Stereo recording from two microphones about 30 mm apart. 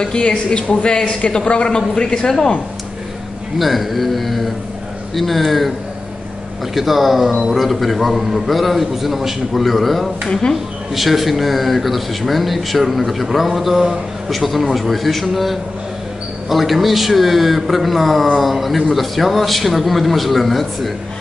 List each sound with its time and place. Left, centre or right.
0.0 s speech: left
1.7 s a man's voice: left
3.5 s speech: centre
6.7 s speech: centre